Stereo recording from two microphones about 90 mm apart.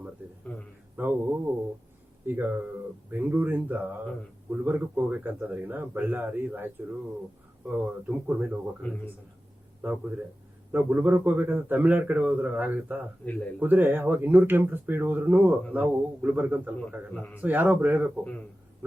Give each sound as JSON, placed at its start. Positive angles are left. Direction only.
{"t": 0.9, "sound": "a man's voice", "side_deg": -20}
{"t": 7.7, "sound": "speech", "side_deg": -20}
{"t": 9.8, "sound": "speech", "side_deg": -25}